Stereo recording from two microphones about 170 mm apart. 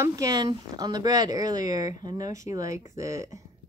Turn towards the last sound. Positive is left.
turn(degrees=-20)  # may be behind; listen again after turning